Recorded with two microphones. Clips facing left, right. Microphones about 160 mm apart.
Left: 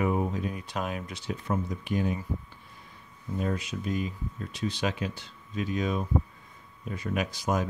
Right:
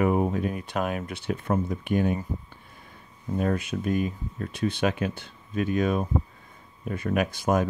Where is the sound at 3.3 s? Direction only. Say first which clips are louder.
Right 5 dB; 55° right (ahead or behind).